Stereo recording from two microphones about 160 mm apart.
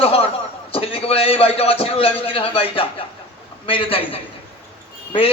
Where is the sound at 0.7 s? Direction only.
35° left (ahead or behind).